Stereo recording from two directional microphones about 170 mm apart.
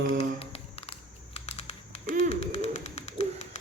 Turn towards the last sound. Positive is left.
turn(degrees=40)  # may be behind; listen again after turning